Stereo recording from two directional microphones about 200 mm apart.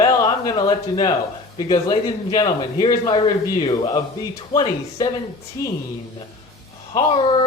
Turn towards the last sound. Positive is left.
turn(degrees=25)  # may be behind; listen again after turning